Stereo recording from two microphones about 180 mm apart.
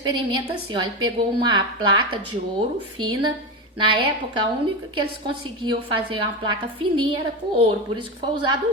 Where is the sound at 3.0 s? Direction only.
25° right (ahead or behind).